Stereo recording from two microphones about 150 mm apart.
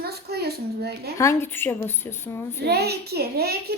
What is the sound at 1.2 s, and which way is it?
A woman's voice, 20° left (ahead or behind).